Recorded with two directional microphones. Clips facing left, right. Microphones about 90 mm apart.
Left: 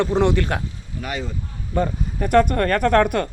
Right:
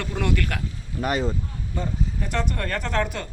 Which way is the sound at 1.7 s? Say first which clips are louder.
Left 7 dB; 60° left (ahead or behind).